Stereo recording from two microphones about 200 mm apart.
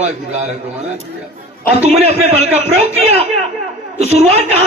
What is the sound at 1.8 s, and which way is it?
Speech, 30° right (ahead or behind).